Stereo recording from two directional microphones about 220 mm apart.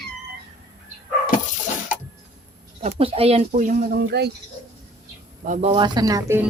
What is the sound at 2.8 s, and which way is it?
Speech, 25° right (ahead or behind).